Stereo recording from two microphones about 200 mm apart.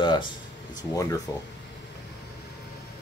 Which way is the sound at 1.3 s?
15° left (ahead or behind).